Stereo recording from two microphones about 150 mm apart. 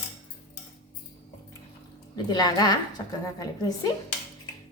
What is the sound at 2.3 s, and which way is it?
A woman's voice, 25° left (ahead or behind).